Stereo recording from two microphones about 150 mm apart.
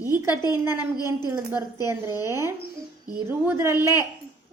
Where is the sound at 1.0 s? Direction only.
25° left (ahead or behind).